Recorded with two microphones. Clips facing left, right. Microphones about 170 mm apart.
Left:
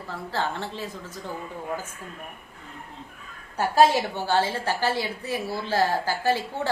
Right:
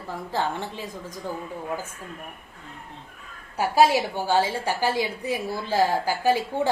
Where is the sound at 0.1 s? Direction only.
15° right (ahead or behind).